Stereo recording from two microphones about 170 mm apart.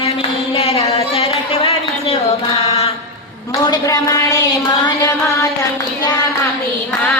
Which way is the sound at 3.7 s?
20° left (ahead or behind).